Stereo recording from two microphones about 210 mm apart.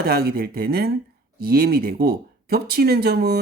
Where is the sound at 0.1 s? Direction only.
45° right (ahead or behind).